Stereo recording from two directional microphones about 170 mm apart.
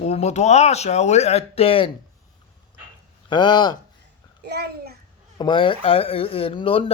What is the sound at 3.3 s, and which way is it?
Speech, 25° left (ahead or behind).